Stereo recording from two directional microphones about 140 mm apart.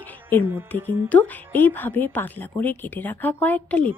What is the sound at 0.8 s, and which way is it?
A woman's voice, 15° left (ahead or behind).